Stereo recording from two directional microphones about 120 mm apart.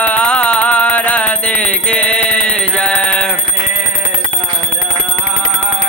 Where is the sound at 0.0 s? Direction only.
10° left (ahead or behind).